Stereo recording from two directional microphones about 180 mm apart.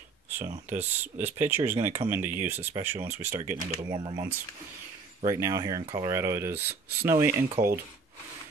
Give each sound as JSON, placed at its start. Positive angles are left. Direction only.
{"t": 0.7, "sound": "speech", "side_deg": -10}
{"t": 1.8, "sound": "speech", "side_deg": -40}
{"t": 2.0, "sound": "speech", "side_deg": -10}